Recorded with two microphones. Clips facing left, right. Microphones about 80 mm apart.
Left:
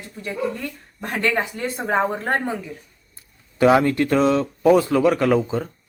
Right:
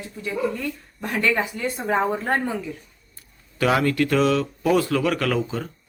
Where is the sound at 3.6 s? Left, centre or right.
Left.